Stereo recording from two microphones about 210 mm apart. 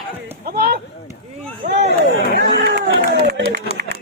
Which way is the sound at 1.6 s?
55° right (ahead or behind).